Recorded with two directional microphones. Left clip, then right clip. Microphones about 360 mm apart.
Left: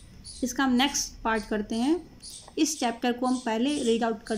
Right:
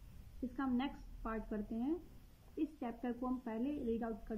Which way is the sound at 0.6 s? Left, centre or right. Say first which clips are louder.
Left 16 dB; centre.